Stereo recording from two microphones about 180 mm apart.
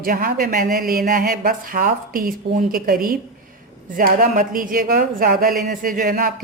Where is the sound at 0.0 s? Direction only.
55° right (ahead or behind).